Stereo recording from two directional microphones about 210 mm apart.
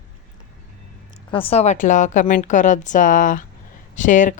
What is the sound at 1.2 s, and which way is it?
Speech, 25° left (ahead or behind).